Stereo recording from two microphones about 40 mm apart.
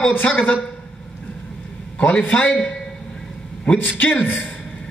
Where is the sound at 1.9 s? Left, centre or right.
Left.